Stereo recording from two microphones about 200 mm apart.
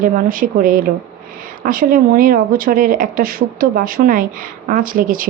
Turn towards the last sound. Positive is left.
turn(degrees=-45)  # may be behind; listen again after turning